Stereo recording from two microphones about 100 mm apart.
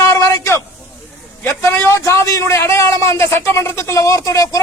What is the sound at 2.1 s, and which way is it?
Speech, 30° left (ahead or behind).